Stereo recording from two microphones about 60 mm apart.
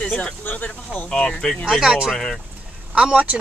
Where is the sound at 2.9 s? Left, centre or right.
Centre.